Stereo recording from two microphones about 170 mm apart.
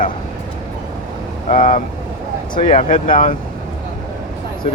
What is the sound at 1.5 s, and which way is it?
Speech, 45° left (ahead or behind).